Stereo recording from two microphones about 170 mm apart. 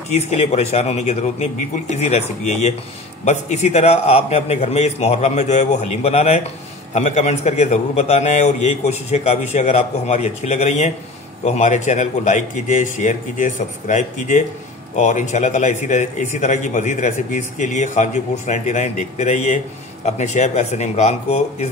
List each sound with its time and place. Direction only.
0.1 s a man's voice: 40° left (ahead or behind)